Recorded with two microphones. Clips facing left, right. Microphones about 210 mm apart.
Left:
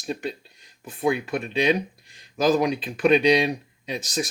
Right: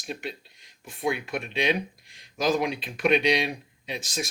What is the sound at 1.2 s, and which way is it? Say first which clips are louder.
Speech: left 5 dB; 35° left (ahead or behind).